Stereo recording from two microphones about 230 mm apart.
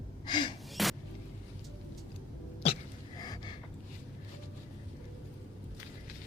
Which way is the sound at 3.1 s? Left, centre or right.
Centre.